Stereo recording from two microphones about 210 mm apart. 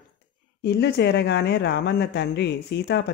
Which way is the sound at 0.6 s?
50° left (ahead or behind).